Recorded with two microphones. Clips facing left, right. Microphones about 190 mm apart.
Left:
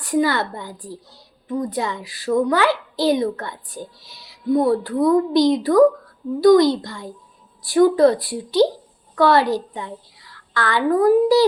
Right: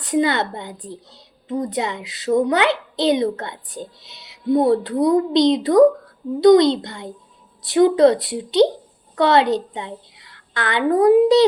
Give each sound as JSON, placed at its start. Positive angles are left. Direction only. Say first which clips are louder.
{"t": 0.0, "sound": "a woman's voice", "louder": "even", "side_deg": -20}